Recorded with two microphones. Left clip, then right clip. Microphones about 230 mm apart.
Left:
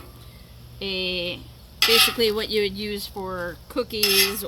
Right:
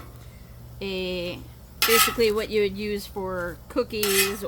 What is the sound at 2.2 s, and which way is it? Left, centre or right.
Speech, centre.